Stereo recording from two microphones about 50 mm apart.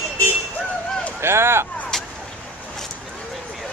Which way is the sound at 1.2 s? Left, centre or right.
Right.